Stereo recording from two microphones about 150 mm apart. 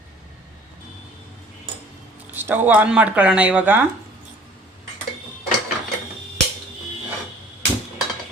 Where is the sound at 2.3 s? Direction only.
10° right (ahead or behind).